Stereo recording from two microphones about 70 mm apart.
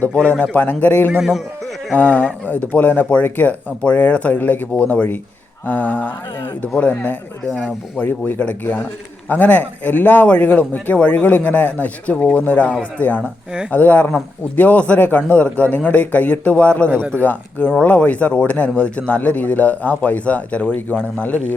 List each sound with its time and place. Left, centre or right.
0.0 s speech: centre
4.7 s speech: centre
16.9 s speech: right
17.2 s speech: left